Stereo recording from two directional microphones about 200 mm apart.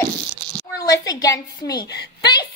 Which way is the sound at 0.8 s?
20° left (ahead or behind).